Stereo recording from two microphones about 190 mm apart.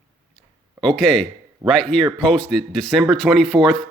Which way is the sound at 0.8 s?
5° left (ahead or behind).